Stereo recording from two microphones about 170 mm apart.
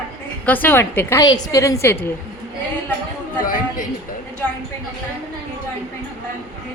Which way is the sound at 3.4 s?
55° left (ahead or behind).